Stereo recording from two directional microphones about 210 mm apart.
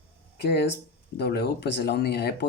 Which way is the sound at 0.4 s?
50° left (ahead or behind).